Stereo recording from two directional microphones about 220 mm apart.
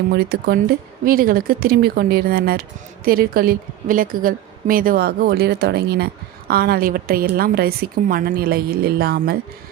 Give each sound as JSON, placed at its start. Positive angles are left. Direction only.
{"t": 0.1, "sound": "speech", "side_deg": -45}